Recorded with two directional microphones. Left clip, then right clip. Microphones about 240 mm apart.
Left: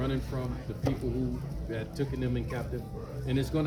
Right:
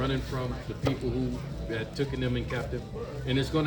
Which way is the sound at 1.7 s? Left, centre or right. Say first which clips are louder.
Right 3 dB; centre.